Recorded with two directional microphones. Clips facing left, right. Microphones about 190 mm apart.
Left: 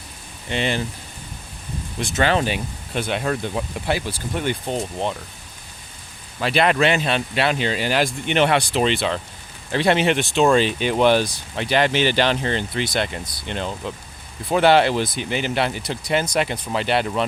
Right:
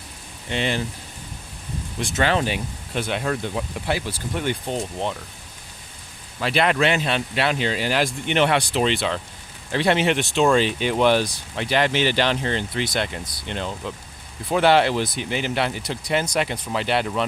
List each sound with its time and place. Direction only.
0.5 s speech: 20° left (ahead or behind)
2.1 s speech: 25° left (ahead or behind)
6.4 s speech: 25° left (ahead or behind)